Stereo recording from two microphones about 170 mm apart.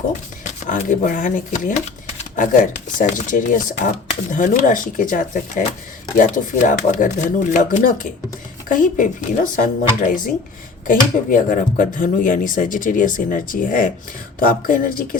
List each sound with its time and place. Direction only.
0.7 s speech: 50° left (ahead or behind)